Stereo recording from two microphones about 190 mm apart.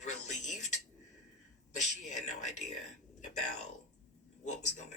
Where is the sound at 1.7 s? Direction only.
40° left (ahead or behind).